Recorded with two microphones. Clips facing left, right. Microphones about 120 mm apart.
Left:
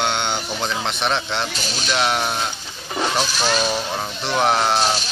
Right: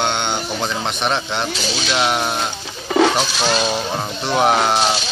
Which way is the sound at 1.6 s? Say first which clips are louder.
Right 4 dB; 75° right (ahead or behind).